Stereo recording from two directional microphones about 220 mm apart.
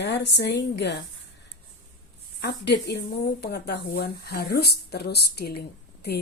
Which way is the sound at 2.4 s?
50° left (ahead or behind).